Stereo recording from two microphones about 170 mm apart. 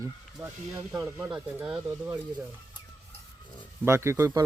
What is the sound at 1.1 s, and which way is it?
Speech, 10° right (ahead or behind).